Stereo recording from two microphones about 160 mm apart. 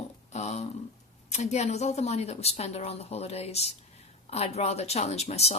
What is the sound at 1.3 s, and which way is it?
Speech, 45° left (ahead or behind).